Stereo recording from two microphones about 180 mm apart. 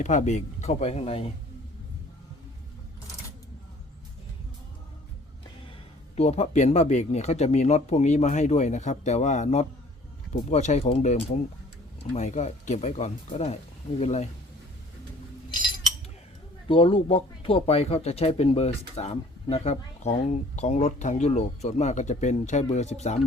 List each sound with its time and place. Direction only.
0.0 s speech: 40° left (ahead or behind)
6.1 s speech: 35° left (ahead or behind)
16.6 s speech: 30° left (ahead or behind)